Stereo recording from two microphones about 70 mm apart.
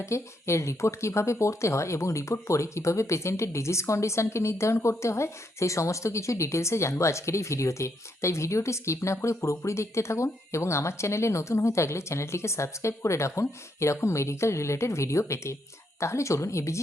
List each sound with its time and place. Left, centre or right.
0.0 s speech: left